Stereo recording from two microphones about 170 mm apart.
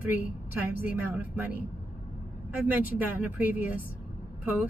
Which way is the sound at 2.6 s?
10° right (ahead or behind).